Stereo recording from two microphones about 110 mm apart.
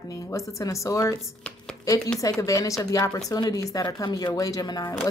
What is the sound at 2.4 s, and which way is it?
Speech, 30° left (ahead or behind).